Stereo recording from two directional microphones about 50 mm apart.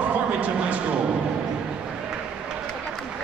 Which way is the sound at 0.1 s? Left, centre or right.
Right.